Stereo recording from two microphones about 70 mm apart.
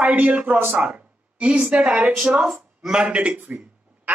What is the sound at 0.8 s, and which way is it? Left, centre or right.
A woman's voice, centre.